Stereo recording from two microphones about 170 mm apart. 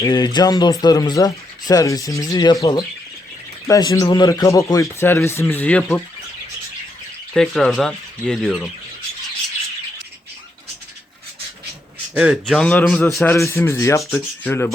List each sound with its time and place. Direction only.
0.0 s speech: 25° left (ahead or behind)
7.3 s speech: 5° left (ahead or behind)
12.1 s a man's voice: 5° right (ahead or behind)
12.5 s speech: 10° left (ahead or behind)
13.2 s speech: 15° left (ahead or behind)
14.0 s speech: centre (ahead or behind)